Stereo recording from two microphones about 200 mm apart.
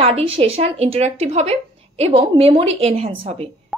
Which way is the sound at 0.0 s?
30° right (ahead or behind).